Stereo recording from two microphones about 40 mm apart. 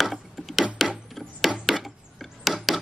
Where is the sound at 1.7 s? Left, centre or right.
Centre.